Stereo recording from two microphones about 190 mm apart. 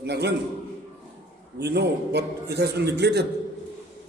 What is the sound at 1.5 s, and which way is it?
A man's voice, 60° right (ahead or behind).